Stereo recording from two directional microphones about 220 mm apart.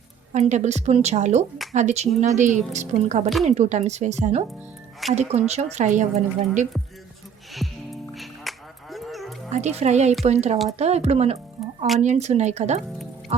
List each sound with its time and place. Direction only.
0.3 s a woman's voice: 30° right (ahead or behind)
5.0 s speech: centre (ahead or behind)
5.5 s a woman's voice: 30° right (ahead or behind)
8.1 s music: centre (ahead or behind)
9.5 s a woman's voice: 30° right (ahead or behind)